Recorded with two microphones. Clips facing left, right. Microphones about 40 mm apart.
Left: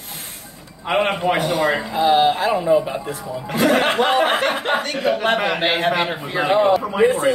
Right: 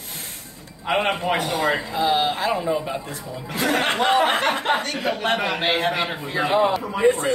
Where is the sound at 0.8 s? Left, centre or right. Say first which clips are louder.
Left 3 dB; centre.